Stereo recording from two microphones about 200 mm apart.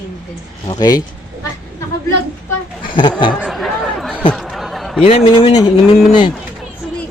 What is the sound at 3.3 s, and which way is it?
Chatter, centre (ahead or behind).